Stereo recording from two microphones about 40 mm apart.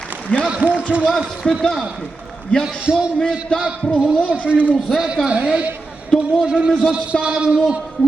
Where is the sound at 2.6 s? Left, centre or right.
Right.